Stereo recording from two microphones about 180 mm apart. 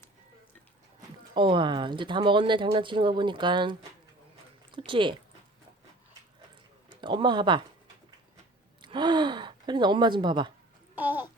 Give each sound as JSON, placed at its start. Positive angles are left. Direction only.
{"t": 1.3, "sound": "speech", "side_deg": -25}
{"t": 4.9, "sound": "speech", "side_deg": -25}
{"t": 6.9, "sound": "speech", "side_deg": -25}
{"t": 8.8, "sound": "speech", "side_deg": -25}
{"t": 10.9, "sound": "babbling", "side_deg": -10}